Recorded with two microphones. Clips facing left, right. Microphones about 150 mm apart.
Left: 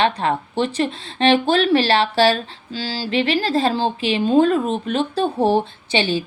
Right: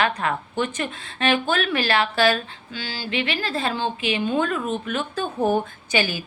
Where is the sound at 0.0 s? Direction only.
30° left (ahead or behind).